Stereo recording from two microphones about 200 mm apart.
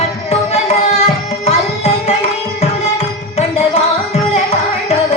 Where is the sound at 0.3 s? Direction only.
35° left (ahead or behind).